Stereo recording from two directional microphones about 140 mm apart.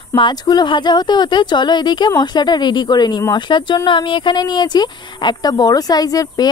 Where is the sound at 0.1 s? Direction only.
30° left (ahead or behind).